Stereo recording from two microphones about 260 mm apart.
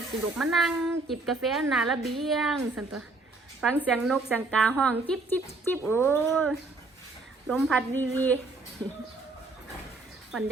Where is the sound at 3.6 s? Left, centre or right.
Centre.